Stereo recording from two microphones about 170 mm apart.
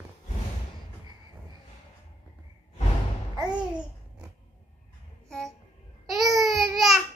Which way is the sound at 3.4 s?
25° right (ahead or behind).